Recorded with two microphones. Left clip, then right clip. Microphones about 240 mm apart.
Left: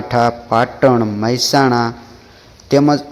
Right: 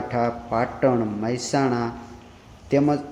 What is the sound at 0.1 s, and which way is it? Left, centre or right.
Speech, left.